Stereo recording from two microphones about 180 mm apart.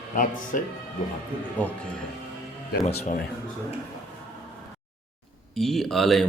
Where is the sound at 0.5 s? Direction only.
50° left (ahead or behind).